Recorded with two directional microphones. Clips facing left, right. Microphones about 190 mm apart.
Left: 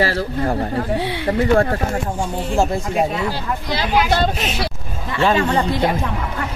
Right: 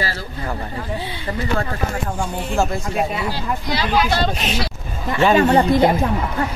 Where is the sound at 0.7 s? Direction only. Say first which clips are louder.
Left 6 dB; 70° left (ahead or behind).